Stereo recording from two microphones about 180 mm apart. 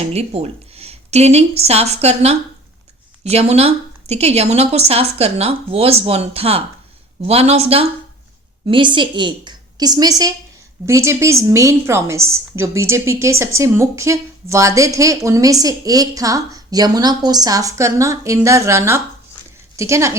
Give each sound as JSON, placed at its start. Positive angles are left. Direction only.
{"t": 0.1, "sound": "a woman's voice", "side_deg": -35}